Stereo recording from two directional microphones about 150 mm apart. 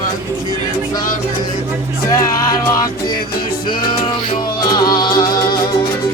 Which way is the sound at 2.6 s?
20° left (ahead or behind).